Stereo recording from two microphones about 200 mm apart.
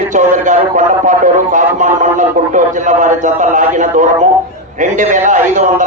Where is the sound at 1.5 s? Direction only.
40° right (ahead or behind).